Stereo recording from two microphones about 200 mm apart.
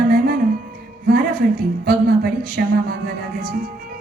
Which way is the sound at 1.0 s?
45° right (ahead or behind).